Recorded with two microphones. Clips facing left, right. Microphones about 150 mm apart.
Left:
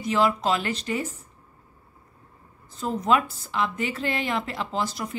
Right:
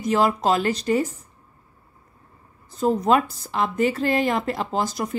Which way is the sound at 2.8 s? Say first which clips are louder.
Right 4 dB; 40° right (ahead or behind).